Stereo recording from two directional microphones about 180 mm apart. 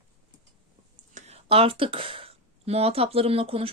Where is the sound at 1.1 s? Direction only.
35° right (ahead or behind).